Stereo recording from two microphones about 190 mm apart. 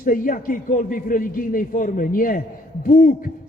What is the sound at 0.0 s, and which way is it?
A man's voice, 45° left (ahead or behind).